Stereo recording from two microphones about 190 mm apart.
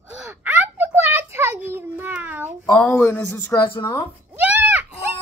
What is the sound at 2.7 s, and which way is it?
Speech, 10° left (ahead or behind).